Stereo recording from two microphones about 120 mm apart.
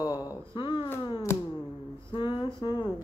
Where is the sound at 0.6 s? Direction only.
45° left (ahead or behind).